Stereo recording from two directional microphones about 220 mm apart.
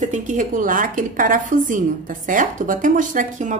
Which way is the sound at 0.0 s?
35° right (ahead or behind).